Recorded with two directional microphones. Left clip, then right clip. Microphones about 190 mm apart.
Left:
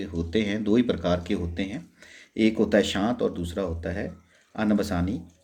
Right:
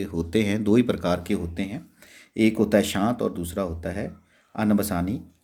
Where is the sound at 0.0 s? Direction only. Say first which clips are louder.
Right 2 dB; 35° right (ahead or behind).